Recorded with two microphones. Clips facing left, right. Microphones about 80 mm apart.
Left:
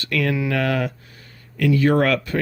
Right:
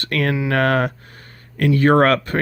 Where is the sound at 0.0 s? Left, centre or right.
Right.